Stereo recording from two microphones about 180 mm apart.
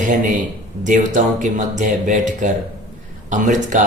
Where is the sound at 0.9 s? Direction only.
45° right (ahead or behind).